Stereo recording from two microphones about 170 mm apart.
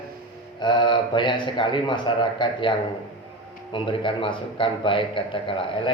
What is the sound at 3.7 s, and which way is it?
A man's voice, 30° left (ahead or behind).